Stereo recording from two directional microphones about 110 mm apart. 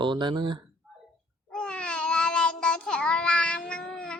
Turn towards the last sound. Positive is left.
turn(degrees=5)  # may be behind; listen again after turning